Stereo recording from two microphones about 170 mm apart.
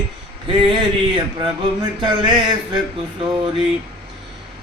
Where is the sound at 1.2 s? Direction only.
25° right (ahead or behind).